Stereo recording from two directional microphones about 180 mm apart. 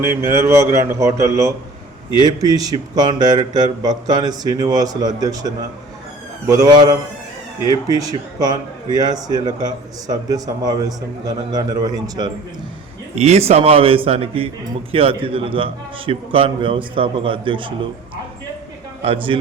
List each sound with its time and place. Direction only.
0.0 s a man's voice: 15° right (ahead or behind)
13.1 s a man's voice: 40° right (ahead or behind)
19.0 s a man's voice: 30° right (ahead or behind)